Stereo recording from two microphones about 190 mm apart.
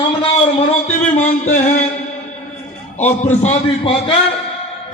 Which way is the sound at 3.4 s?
35° left (ahead or behind).